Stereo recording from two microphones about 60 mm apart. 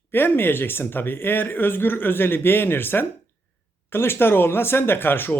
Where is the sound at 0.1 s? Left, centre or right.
Left.